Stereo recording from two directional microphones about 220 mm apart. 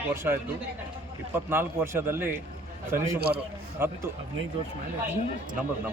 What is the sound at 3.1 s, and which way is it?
Speech, 45° right (ahead or behind).